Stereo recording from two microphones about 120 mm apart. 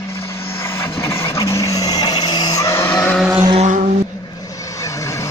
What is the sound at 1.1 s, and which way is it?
Vehicle, 20° left (ahead or behind).